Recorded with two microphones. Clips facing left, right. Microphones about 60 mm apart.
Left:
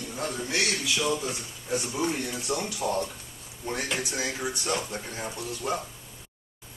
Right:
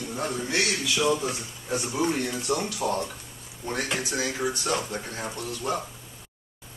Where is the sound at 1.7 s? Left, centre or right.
Centre.